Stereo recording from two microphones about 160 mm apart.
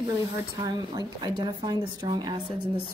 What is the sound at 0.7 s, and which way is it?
A woman's voice, 25° right (ahead or behind).